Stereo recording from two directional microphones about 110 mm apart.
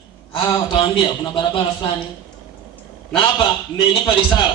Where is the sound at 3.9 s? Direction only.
50° left (ahead or behind).